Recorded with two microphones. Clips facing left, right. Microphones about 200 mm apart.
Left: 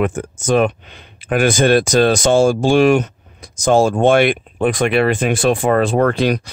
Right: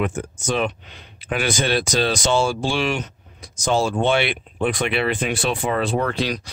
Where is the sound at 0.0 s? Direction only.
50° left (ahead or behind).